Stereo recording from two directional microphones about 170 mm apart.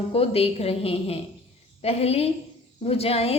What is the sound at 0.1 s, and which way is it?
A woman's voice, 35° left (ahead or behind).